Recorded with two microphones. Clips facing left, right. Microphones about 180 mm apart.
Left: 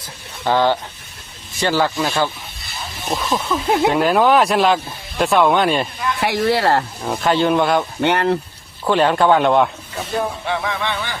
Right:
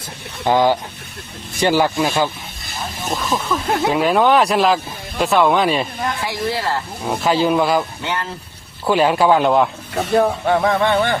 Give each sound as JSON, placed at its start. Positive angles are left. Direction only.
{"t": 0.4, "sound": "speech", "side_deg": -15}
{"t": 3.1, "sound": "speech", "side_deg": 5}
{"t": 6.1, "sound": "speech", "side_deg": 65}
{"t": 7.0, "sound": "speech", "side_deg": -5}
{"t": 8.0, "sound": "speech", "side_deg": 65}
{"t": 8.8, "sound": "speech", "side_deg": -10}
{"t": 9.9, "sound": "speech", "side_deg": -65}
{"t": 10.4, "sound": "speech", "side_deg": -45}